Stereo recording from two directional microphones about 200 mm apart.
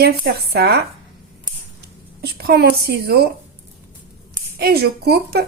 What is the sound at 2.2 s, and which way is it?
A woman's voice, 50° right (ahead or behind).